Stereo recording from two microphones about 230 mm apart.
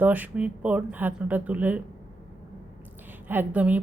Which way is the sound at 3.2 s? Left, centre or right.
Centre.